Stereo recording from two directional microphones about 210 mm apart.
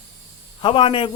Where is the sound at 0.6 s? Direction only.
25° left (ahead or behind).